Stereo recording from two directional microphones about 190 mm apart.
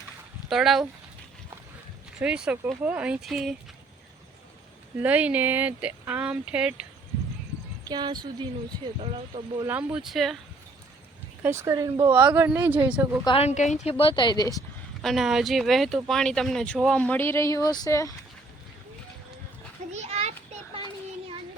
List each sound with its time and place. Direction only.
0.5 s speech: centre (ahead or behind)
2.1 s speech: 5° right (ahead or behind)
5.0 s speech: 5° right (ahead or behind)
7.9 s speech: 20° right (ahead or behind)
9.6 s speech: 5° right (ahead or behind)
11.4 s speech: 15° right (ahead or behind)
13.2 s speech: 30° left (ahead or behind)
14.0 s speech: 25° left (ahead or behind)
15.0 s speech: centre (ahead or behind); by 18.1 s 20° left (ahead or behind)
19.9 s children playing: 35° right (ahead or behind)